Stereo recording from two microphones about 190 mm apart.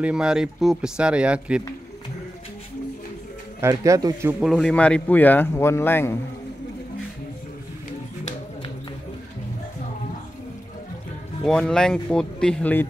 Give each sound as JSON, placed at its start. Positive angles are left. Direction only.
{"t": 0.0, "sound": "speech", "side_deg": -5}
{"t": 3.6, "sound": "speech", "side_deg": -15}
{"t": 4.5, "sound": "speech", "side_deg": 5}
{"t": 11.4, "sound": "speech", "side_deg": 5}